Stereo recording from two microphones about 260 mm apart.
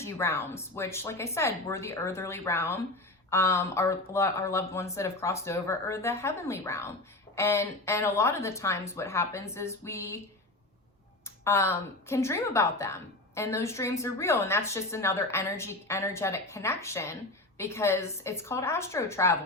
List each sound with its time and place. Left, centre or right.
0.0 s a woman's voice: centre
11.4 s a woman's voice: centre